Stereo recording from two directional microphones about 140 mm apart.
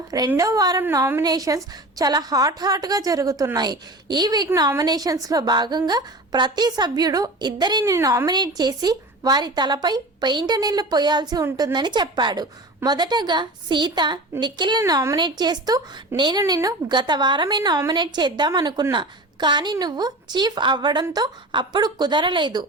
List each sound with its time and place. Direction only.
0.3 s a woman's voice: 25° right (ahead or behind)
1.2 s a woman's voice: 25° right (ahead or behind)
7.9 s a woman's voice: 20° right (ahead or behind)